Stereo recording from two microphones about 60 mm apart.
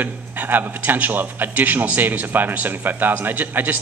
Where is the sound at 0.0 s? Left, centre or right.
Right.